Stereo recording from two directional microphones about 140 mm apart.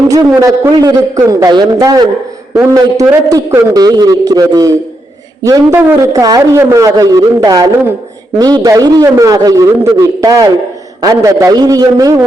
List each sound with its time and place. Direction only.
0.1 s a man's voice: 25° right (ahead or behind)